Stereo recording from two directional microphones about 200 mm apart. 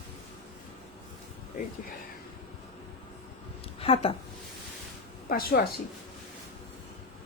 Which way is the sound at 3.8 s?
30° left (ahead or behind).